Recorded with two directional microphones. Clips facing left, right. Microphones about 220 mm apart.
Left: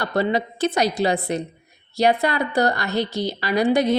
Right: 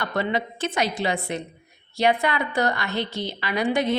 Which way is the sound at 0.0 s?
35° left (ahead or behind).